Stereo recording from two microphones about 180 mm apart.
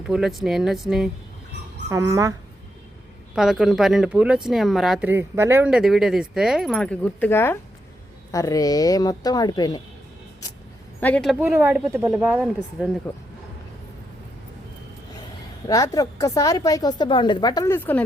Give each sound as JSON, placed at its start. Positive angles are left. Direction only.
{"t": 0.1, "sound": "a woman's voice", "side_deg": 0}
{"t": 1.9, "sound": "speech", "side_deg": -15}
{"t": 3.3, "sound": "a woman's voice", "side_deg": -5}
{"t": 11.0, "sound": "a woman's voice", "side_deg": 5}
{"t": 11.3, "sound": "speech", "side_deg": -10}
{"t": 15.6, "sound": "a woman's voice", "side_deg": 20}